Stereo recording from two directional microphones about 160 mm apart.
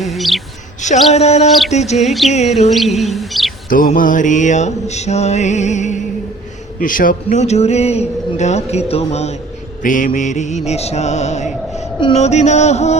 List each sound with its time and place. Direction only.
0.0 s speech: centre (ahead or behind)
1.1 s a man's voice: 40° left (ahead or behind)
1.5 s speech: centre (ahead or behind)
1.7 s a man's voice: 45° left (ahead or behind)
2.6 s speech: centre (ahead or behind)
3.7 s a man's voice: 60° left (ahead or behind)
6.7 s a man's voice: 60° left (ahead or behind); by 9.3 s 40° left (ahead or behind)
9.8 s a man's voice: 55° left (ahead or behind)